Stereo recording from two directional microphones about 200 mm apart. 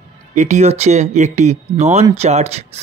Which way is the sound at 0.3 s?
35° right (ahead or behind).